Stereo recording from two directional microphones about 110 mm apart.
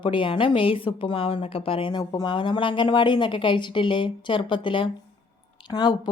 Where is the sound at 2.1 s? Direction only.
45° left (ahead or behind).